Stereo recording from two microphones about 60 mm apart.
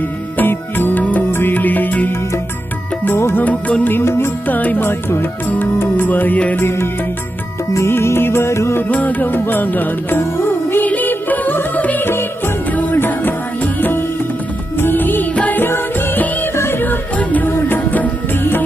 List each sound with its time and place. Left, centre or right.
0.3 s music: left
1.3 s music: left
3.3 s music: left
4.0 s music: left
4.4 s music: left
4.9 s music: left
6.6 s music: left
8.8 s music: left
16.6 s music: left